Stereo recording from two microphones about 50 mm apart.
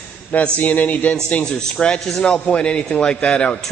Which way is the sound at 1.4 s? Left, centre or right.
Centre.